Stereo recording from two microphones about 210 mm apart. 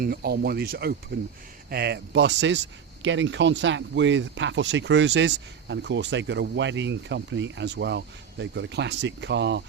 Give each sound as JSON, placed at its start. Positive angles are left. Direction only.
{"t": 0.0, "sound": "speech", "side_deg": -45}